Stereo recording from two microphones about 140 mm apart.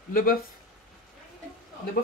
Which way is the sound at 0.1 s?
90° left.